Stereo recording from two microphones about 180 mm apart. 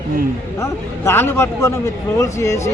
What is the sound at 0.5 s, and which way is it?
A man's voice, 15° left (ahead or behind).